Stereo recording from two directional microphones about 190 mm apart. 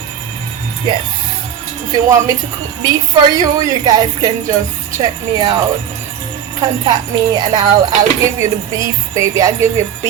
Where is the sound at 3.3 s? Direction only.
20° right (ahead or behind).